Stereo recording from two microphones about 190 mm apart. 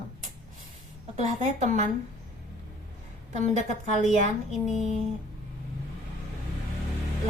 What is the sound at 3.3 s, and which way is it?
Speech, 40° right (ahead or behind).